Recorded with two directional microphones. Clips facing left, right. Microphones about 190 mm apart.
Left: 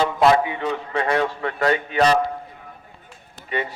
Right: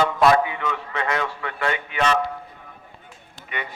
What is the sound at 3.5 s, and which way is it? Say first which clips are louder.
Speech: left 7 dB; 35° left (ahead or behind).